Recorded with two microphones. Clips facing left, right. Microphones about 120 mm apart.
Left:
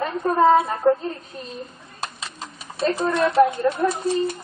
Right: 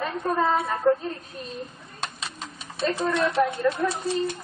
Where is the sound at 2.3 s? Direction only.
35° left (ahead or behind).